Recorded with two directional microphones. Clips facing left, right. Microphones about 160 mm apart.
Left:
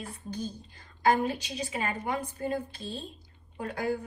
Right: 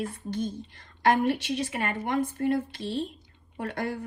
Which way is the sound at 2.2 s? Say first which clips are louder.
Right 6 dB; 90° right.